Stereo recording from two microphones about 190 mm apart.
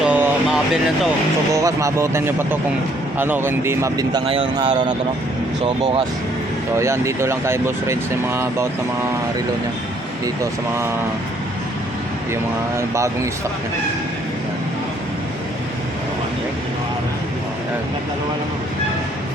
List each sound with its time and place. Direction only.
0.0 s a sound: 5° right (ahead or behind)
1.5 s speech: 15° right (ahead or behind); by 4.9 s 40° right (ahead or behind)
5.6 s speech: 25° right (ahead or behind)
6.7 s speech: 15° right (ahead or behind)
12.3 s speech: 15° right (ahead or behind)